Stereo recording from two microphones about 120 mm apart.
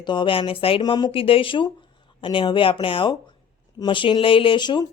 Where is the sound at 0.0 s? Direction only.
40° left (ahead or behind).